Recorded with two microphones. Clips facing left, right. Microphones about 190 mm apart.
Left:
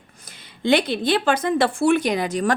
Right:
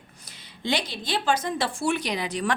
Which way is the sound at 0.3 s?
55° left (ahead or behind).